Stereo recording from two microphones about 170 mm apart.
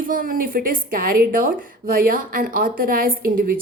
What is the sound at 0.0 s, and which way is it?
A woman's voice, 55° right (ahead or behind).